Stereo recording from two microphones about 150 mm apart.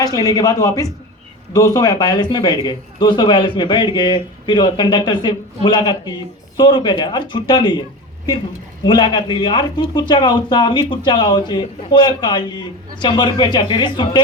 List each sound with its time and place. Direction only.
0.0 s speech: 25° left (ahead or behind)